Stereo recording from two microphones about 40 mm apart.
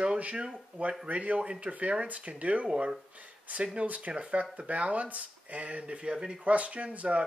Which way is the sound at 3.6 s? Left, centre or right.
Right.